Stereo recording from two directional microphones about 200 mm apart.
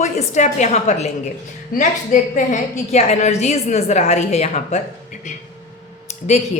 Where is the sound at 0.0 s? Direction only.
35° left (ahead or behind).